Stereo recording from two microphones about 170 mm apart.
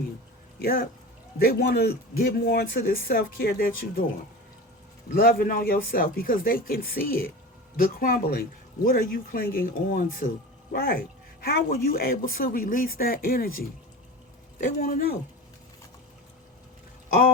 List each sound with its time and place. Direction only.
0.6 s speech: 55° left (ahead or behind)
5.1 s speech: 55° left (ahead or behind)
14.8 s speech: 55° left (ahead or behind)